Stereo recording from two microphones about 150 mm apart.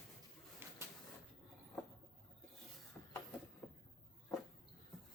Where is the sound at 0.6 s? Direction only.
15° right (ahead or behind).